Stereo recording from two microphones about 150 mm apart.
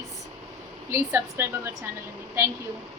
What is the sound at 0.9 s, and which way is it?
Speech, 15° right (ahead or behind).